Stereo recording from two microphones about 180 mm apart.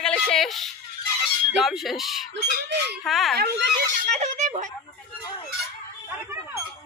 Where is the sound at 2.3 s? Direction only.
85° right.